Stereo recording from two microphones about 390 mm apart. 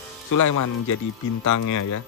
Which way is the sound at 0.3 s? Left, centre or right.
Left.